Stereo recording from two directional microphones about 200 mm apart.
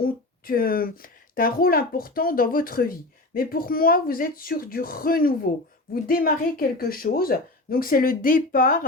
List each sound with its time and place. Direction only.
0.0 s speech: 45° left (ahead or behind)